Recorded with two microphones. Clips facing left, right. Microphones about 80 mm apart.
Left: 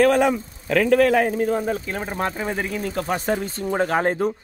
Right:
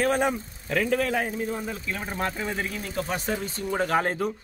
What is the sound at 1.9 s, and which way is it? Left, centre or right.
Speech, left.